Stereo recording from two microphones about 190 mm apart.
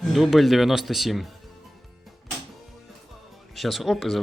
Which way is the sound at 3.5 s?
Centre (ahead or behind).